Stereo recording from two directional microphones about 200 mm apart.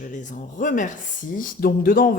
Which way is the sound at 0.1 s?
40° left (ahead or behind).